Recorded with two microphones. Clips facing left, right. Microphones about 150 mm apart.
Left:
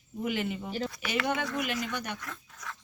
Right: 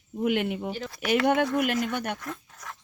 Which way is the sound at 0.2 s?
60° right (ahead or behind).